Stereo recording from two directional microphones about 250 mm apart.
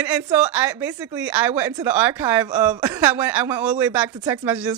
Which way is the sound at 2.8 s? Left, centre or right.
Centre.